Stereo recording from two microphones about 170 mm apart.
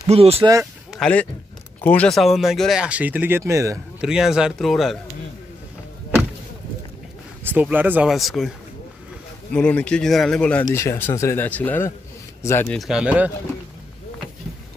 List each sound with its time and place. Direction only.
0.1 s speech: 35° right (ahead or behind)
0.4 s speech: 15° right (ahead or behind)
0.9 s speech: 5° left (ahead or behind); by 3.8 s 20° right (ahead or behind)
4.0 s speech: 5° right (ahead or behind)
7.4 s speech: 10° right (ahead or behind)
9.5 s speech: 5° left (ahead or behind)
10.6 s speech: 15° left (ahead or behind)
12.7 s speech: centre (ahead or behind)